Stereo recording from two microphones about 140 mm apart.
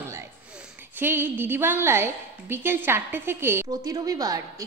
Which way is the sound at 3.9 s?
25° right (ahead or behind).